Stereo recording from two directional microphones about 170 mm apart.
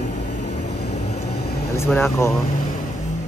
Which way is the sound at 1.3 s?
70° left (ahead or behind).